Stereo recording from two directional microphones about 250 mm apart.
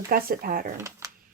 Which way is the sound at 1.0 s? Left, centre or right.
Centre.